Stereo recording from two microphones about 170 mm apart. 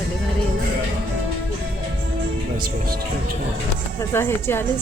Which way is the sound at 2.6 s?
60° right (ahead or behind).